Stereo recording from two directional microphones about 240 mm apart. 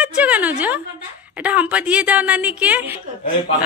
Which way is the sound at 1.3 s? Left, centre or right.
Centre.